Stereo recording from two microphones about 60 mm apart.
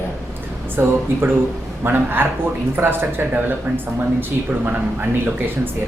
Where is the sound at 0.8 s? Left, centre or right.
Right.